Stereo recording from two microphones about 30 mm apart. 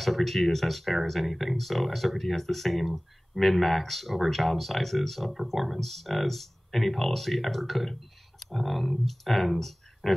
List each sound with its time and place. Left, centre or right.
0.0 s speech: centre